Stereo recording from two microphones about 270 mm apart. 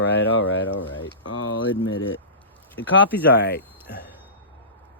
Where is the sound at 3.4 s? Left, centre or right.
Left.